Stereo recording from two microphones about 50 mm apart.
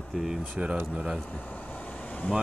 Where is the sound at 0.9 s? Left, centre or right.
Centre.